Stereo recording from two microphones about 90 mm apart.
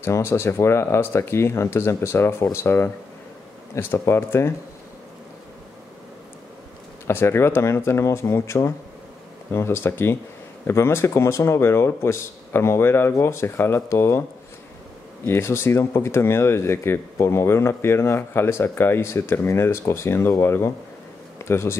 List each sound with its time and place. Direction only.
0.0 s speech: 30° left (ahead or behind)
7.1 s speech: 25° left (ahead or behind)
15.2 s speech: 30° left (ahead or behind)